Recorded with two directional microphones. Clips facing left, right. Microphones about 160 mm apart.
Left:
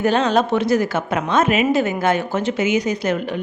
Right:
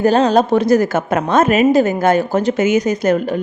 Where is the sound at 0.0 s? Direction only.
35° right (ahead or behind).